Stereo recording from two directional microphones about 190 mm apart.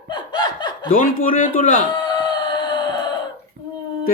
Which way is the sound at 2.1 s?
25° left (ahead or behind).